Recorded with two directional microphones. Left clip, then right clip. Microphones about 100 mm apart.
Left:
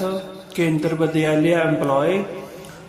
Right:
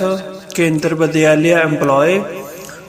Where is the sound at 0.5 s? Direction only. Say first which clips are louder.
Right 5 dB; 30° right (ahead or behind).